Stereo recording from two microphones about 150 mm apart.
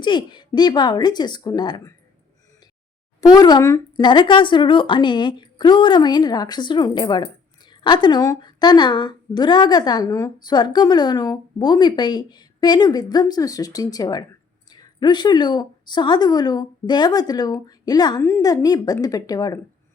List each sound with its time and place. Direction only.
0.0 s a woman's voice: 30° left (ahead or behind)
3.2 s a woman's voice: 25° left (ahead or behind)